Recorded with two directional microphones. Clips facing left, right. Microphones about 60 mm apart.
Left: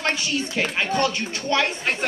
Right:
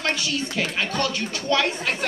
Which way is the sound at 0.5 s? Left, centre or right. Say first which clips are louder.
Left 4 dB; left.